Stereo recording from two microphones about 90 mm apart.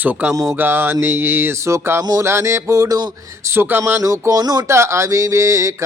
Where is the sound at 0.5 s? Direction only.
20° right (ahead or behind).